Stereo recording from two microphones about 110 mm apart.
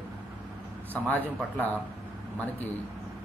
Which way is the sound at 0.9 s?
15° left (ahead or behind).